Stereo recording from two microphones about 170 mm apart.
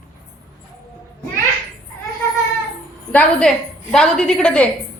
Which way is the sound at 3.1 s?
5° left (ahead or behind).